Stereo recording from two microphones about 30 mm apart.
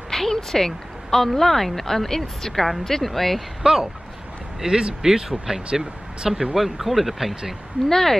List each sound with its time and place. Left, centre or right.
0.1 s speech: centre
3.6 s speech: centre
6.6 s speech: centre
7.9 s speech: centre